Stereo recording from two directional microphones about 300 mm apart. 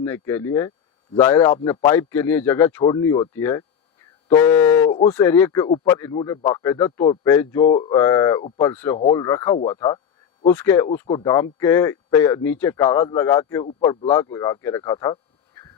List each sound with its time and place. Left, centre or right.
0.0 s speech: centre